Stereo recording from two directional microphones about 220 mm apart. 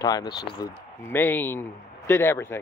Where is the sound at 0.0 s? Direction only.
20° left (ahead or behind).